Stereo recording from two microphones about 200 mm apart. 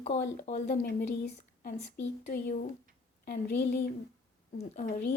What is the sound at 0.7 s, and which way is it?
Speech, 55° left (ahead or behind).